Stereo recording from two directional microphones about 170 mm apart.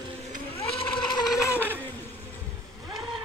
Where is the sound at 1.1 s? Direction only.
15° left (ahead or behind).